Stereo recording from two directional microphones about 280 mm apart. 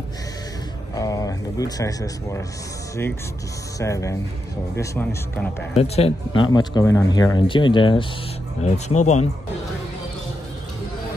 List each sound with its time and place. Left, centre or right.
0.9 s speech: centre
3.8 s speech: centre
5.8 s speech: left